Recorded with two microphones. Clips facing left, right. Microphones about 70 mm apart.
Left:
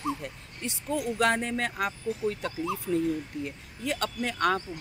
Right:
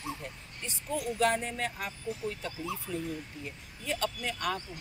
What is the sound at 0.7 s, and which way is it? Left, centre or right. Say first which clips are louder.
Speech: left 4 dB; left.